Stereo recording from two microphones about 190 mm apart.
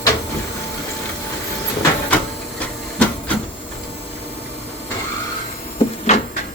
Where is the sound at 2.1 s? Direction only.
5° left (ahead or behind).